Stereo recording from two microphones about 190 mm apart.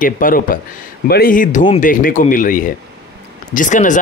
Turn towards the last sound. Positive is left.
turn(degrees=40)  # may be behind; listen again after turning